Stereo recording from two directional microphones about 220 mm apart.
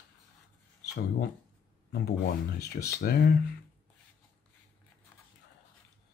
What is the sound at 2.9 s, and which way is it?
Speech, 45° left (ahead or behind).